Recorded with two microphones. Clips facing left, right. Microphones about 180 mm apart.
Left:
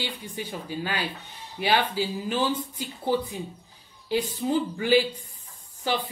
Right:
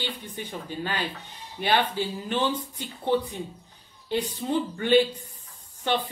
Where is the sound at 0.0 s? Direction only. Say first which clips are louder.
Left 1 dB; 10° left (ahead or behind).